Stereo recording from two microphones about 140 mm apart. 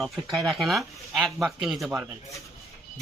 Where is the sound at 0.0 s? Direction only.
Centre (ahead or behind).